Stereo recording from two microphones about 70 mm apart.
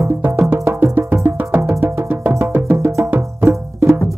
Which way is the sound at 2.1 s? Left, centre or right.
Right.